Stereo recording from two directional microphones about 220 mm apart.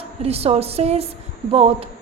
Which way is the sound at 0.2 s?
30° right (ahead or behind).